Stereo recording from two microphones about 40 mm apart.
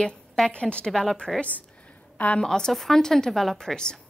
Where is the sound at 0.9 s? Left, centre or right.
Centre.